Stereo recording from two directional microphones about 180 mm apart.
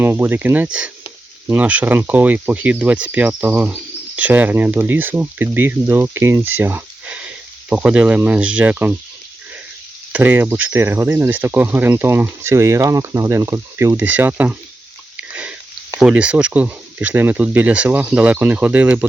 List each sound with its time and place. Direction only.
0.0 s speech: 10° right (ahead or behind)
10.1 s speech: 10° right (ahead or behind)